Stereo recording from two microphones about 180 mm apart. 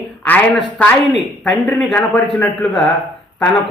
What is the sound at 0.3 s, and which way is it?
Speech, 5° left (ahead or behind).